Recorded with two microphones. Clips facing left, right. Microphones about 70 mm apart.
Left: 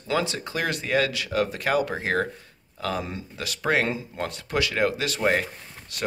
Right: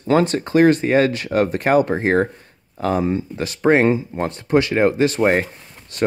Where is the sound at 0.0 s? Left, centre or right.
Right.